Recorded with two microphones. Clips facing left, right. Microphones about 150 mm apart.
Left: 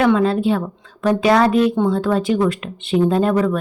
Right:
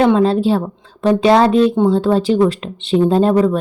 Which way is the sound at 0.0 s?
30° right (ahead or behind).